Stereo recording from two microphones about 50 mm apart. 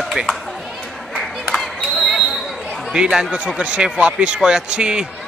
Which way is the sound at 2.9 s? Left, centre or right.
Centre.